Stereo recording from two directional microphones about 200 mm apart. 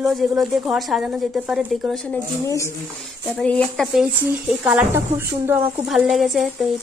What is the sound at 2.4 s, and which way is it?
Speech, 15° left (ahead or behind).